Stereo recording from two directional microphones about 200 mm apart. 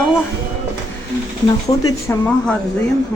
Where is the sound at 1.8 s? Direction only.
10° left (ahead or behind).